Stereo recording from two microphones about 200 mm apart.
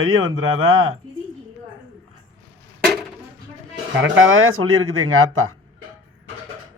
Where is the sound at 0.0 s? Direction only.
90° right.